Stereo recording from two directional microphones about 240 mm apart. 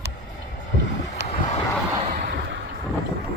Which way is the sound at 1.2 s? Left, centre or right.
Right.